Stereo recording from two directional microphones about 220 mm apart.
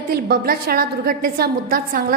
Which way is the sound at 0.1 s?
40° right (ahead or behind).